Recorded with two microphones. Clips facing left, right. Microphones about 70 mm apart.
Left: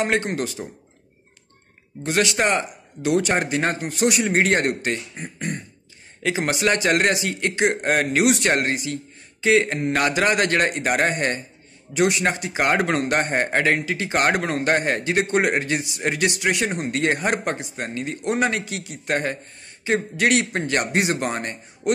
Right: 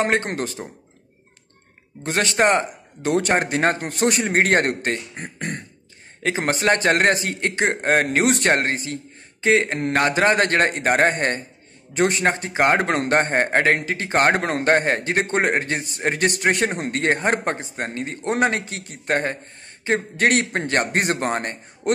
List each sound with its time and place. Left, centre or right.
0.0 s a man's voice: right
2.0 s a man's voice: right
6.2 s a man's voice: right